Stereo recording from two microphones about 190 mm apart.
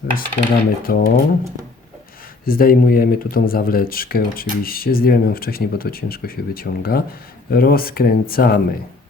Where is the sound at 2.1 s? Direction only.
50° left (ahead or behind).